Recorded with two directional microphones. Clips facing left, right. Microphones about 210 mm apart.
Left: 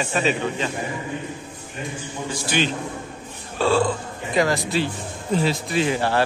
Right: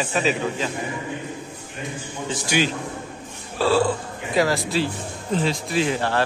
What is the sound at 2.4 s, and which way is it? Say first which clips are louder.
A man's voice: right 1 dB; 10° right (ahead or behind).